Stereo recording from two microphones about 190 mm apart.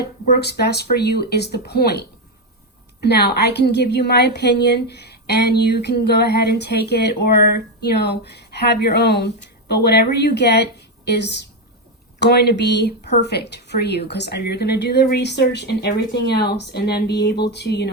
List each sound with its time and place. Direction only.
0.3 s a woman's voice: 60° left (ahead or behind)